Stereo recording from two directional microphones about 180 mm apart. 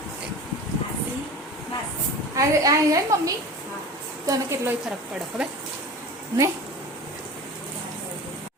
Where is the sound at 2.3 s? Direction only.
20° right (ahead or behind).